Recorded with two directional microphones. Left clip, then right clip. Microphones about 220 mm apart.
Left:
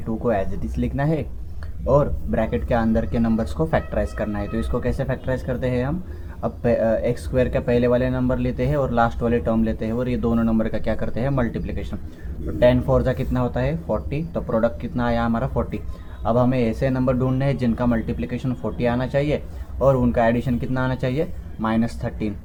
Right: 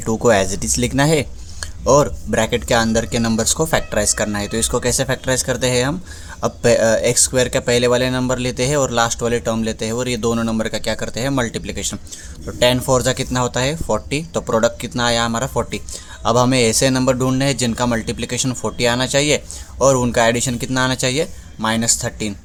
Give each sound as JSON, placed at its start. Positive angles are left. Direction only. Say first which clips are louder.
{"t": 0.0, "sound": "speech", "louder": "right 8 dB", "side_deg": -50}